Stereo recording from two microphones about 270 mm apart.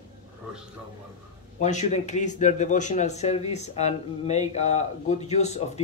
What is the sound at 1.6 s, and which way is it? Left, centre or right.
Speech, left.